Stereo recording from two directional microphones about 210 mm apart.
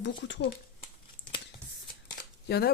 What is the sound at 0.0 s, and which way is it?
Speech, 60° left (ahead or behind).